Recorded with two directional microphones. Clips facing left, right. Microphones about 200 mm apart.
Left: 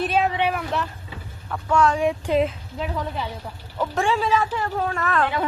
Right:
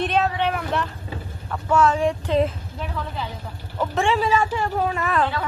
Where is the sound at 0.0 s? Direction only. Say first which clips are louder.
Even; 5° left (ahead or behind).